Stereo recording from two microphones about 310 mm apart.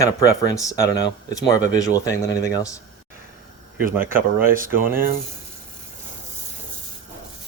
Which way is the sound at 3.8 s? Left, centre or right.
Right.